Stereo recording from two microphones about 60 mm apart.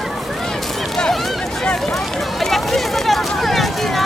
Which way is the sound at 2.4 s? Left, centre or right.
Centre.